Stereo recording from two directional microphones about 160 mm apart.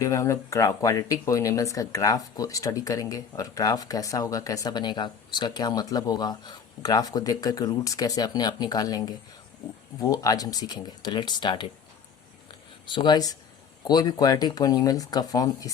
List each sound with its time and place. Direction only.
0.0 s speech: 20° left (ahead or behind)
12.8 s speech: 30° left (ahead or behind)